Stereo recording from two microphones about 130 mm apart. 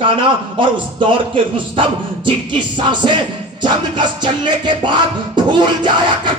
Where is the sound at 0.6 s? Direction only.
40° right (ahead or behind).